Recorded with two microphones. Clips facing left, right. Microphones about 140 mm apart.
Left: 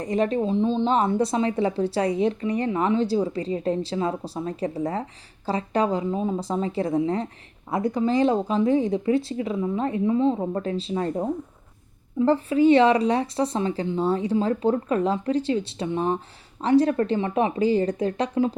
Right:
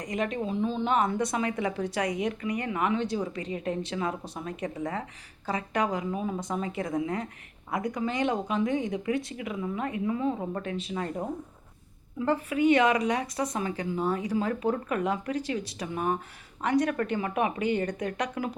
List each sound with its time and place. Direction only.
0.0 s a woman's voice: 30° left (ahead or behind)